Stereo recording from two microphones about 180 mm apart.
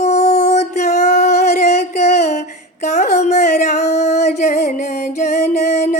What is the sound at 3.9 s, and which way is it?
Music, 40° left (ahead or behind).